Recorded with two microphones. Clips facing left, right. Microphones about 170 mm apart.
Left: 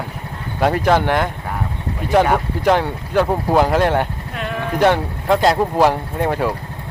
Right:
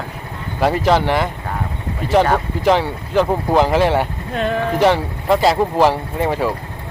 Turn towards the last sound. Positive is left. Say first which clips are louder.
# even
turn(degrees=0)  # may be behind; listen again after turning